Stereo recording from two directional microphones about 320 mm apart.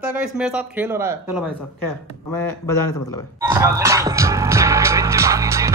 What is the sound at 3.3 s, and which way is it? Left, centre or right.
Music, centre.